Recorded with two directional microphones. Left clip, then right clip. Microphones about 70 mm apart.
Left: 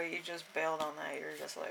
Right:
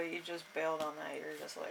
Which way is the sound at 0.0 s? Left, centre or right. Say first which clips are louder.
Left 1 dB; left.